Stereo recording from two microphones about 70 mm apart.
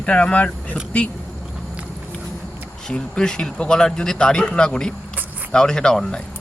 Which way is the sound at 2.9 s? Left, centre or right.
Centre.